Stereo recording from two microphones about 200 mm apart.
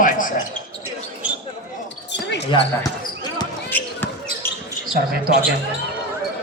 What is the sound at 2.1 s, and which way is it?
Basketball bounce, 60° left (ahead or behind).